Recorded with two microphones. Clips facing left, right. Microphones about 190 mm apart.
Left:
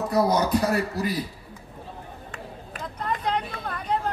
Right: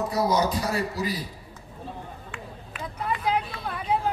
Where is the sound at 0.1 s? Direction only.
55° left (ahead or behind).